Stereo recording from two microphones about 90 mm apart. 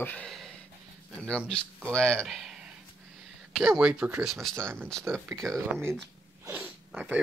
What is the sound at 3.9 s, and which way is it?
Speech, 15° right (ahead or behind).